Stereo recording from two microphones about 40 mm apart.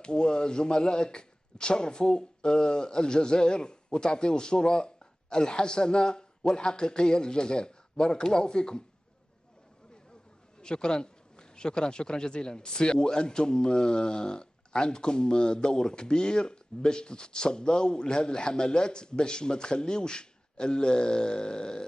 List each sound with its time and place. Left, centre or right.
0.0 s a man's voice: left
10.6 s a man's voice: centre